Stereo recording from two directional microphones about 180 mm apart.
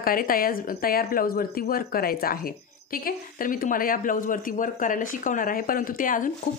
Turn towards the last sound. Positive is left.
turn(degrees=50)  # may be behind; listen again after turning